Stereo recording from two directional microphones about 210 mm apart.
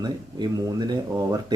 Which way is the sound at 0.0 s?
20° right (ahead or behind).